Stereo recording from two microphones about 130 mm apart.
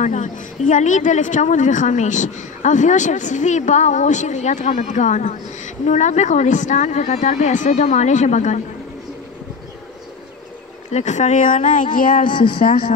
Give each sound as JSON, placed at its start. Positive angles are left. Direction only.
{"t": 0.0, "sound": "a woman's voice", "side_deg": 75}
{"t": 10.9, "sound": "speech", "side_deg": 65}